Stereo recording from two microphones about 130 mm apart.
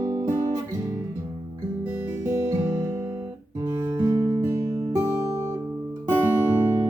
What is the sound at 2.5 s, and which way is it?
Music, 20° right (ahead or behind).